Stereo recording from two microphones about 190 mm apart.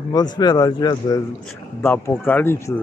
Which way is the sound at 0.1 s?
20° left (ahead or behind).